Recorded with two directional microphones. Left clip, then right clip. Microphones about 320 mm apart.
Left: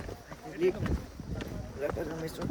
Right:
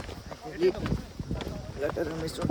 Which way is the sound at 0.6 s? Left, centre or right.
Centre.